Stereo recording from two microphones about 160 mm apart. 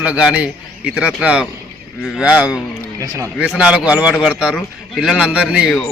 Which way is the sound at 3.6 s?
5° right (ahead or behind).